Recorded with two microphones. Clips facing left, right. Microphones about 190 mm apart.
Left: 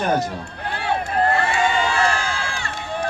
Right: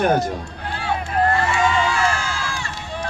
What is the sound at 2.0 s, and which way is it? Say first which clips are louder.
Run: left 1 dB; 60° left (ahead or behind).